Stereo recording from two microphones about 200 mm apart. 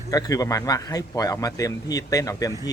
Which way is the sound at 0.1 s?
20° left (ahead or behind).